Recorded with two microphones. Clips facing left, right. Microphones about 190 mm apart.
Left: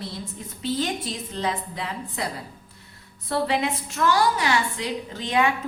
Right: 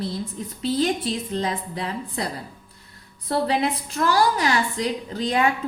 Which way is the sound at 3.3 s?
35° right (ahead or behind).